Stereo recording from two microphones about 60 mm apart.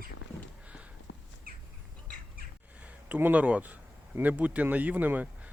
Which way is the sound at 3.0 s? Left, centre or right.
Right.